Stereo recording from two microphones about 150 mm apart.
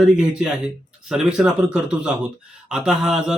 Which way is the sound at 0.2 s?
5° right (ahead or behind).